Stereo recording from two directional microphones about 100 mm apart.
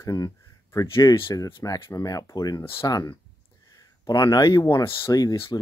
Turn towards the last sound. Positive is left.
turn(degrees=40)  # may be behind; listen again after turning